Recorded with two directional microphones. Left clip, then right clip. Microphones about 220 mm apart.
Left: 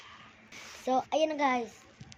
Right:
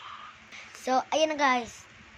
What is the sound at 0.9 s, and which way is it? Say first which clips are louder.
Speech: right 3 dB; 15° right (ahead or behind).